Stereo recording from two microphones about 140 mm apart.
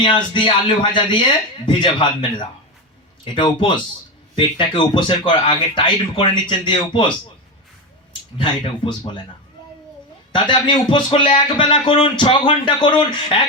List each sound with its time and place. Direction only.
0.0 s speech: 35° left (ahead or behind)
8.4 s speech: 35° left (ahead or behind)
10.3 s speech: 35° left (ahead or behind)